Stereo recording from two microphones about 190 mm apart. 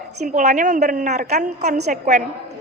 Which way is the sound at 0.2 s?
40° right (ahead or behind).